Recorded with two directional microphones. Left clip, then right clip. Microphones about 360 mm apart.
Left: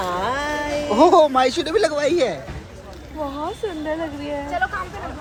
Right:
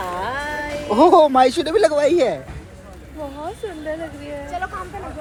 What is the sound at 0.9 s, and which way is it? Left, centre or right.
Speech, centre.